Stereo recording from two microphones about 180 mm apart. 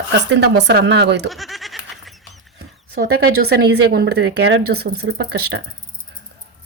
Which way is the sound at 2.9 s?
60° right (ahead or behind).